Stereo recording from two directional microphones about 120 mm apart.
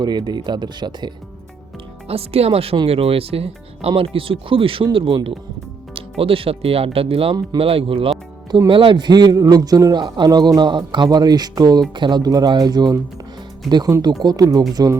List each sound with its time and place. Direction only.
0.0 s a man's voice: 35° right (ahead or behind)
2.0 s speech: 55° right (ahead or behind)
8.4 s a man's voice: 35° right (ahead or behind)